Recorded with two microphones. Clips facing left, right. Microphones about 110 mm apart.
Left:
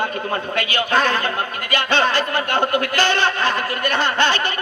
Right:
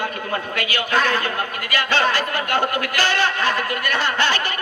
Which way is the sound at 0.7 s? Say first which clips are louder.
Left 1 dB; 25° left (ahead or behind).